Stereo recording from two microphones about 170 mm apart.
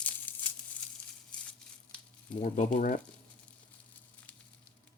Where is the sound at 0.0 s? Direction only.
10° left (ahead or behind).